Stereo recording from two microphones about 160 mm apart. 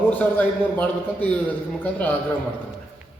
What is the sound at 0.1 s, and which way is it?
A man's voice, 10° left (ahead or behind).